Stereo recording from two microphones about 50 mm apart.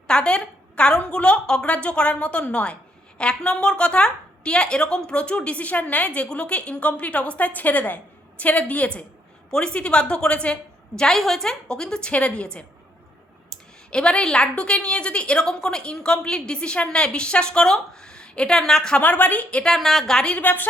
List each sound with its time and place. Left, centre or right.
0.1 s a woman's voice: centre
13.5 s a sound: centre
13.9 s a woman's voice: centre
19.0 s speech: left
19.6 s a woman's voice: centre
20.2 s speech: left